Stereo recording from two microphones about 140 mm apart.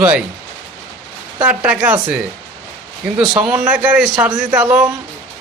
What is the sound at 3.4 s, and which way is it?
A man's voice, 10° right (ahead or behind).